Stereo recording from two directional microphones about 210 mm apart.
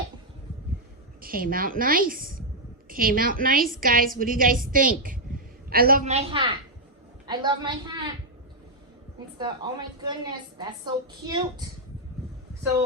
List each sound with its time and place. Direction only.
1.2 s a woman's voice: 45° right (ahead or behind); by 8.1 s 20° right (ahead or behind)
9.4 s a woman's voice: 20° right (ahead or behind)